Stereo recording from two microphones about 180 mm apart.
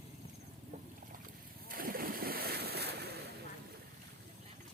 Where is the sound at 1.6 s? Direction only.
55° right (ahead or behind).